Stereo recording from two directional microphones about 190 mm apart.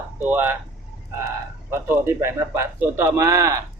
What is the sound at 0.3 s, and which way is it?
Speech, 10° right (ahead or behind).